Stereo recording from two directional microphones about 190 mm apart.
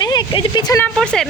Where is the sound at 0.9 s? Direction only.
5° left (ahead or behind).